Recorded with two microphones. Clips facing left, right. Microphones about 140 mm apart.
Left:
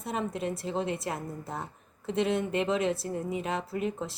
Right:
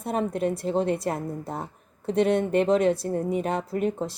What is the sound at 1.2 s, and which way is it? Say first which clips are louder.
Speech: right 5 dB; 25° right (ahead or behind).